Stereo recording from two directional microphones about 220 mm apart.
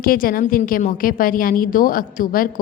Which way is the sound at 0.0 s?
40° left (ahead or behind).